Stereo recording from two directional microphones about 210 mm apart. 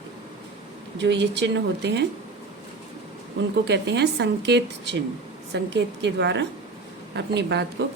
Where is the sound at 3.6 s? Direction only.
55° right (ahead or behind).